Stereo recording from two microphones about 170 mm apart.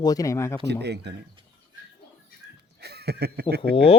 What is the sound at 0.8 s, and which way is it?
Speech, 75° right (ahead or behind).